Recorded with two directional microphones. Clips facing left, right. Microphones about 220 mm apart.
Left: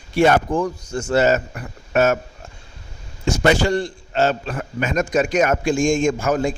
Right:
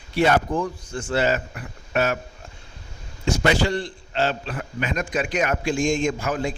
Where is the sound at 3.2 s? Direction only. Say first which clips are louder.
Left 4 dB; 45° left (ahead or behind).